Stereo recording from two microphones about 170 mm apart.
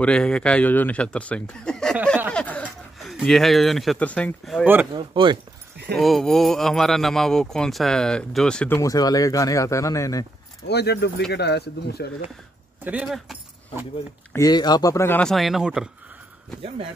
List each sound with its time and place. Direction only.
0.0 s speech: 5° left (ahead or behind)
2.3 s a sound: 5° left (ahead or behind)
2.6 s speech: centre (ahead or behind)
4.9 s speech: 25° right (ahead or behind)
5.9 s speech: centre (ahead or behind); by 10.2 s 20° left (ahead or behind)
10.7 s speech: 75° left (ahead or behind)
12.8 s speech: 5° right (ahead or behind)
14.3 s speech: 20° left (ahead or behind); by 15.9 s 5° right (ahead or behind)